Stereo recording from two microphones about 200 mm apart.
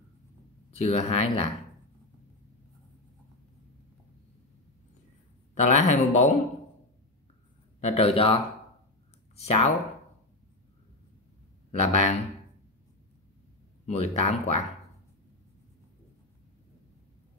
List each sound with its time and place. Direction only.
0.7 s speech: 30° left (ahead or behind)
5.5 s speech: 35° left (ahead or behind)
7.8 s speech: 30° left (ahead or behind)
9.4 s speech: 30° left (ahead or behind)
11.8 s speech: 35° left (ahead or behind)
13.8 s speech: 35° left (ahead or behind)